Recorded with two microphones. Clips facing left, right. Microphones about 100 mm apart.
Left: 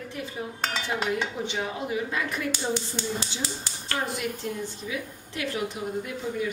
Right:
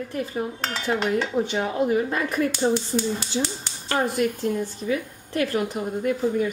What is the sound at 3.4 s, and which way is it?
Speech, 30° right (ahead or behind).